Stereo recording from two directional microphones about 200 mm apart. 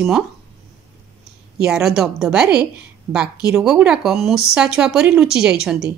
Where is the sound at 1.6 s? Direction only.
5° right (ahead or behind).